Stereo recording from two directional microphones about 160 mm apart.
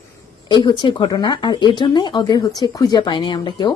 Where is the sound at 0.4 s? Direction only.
30° left (ahead or behind).